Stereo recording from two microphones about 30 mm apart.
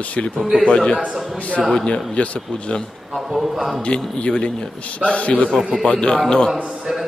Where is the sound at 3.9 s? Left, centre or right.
Left.